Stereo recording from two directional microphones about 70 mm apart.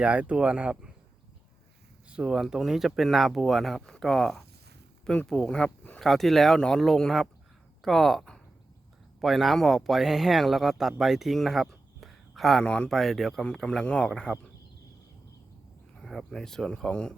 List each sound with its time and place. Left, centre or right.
0.0 s speech: centre
2.0 s speech: centre
12.6 s speech: centre
12.9 s speech: centre
16.0 s speech: centre